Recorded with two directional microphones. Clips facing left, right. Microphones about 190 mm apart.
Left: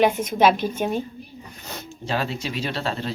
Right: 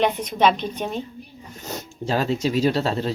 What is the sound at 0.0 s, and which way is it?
A woman's voice, 5° left (ahead or behind).